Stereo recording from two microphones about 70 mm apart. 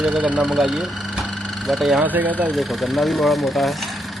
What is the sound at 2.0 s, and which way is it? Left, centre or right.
Speech, right.